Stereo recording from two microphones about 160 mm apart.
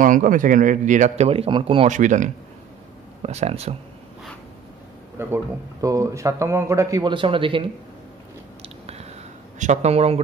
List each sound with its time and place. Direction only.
0.0 s speech: 55° right (ahead or behind); by 1.9 s 35° right (ahead or behind)
1.9 s speech: 50° right (ahead or behind)
5.3 s speech: 20° right (ahead or behind)
8.6 s biting: 40° right (ahead or behind)
9.6 s speech: 45° right (ahead or behind)